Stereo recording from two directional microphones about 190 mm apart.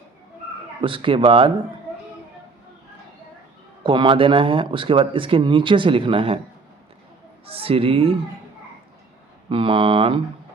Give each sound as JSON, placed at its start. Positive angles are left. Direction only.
{"t": 0.8, "sound": "speech", "side_deg": -25}
{"t": 3.8, "sound": "speech", "side_deg": -25}
{"t": 7.4, "sound": "speech", "side_deg": -30}
{"t": 9.5, "sound": "speech", "side_deg": -30}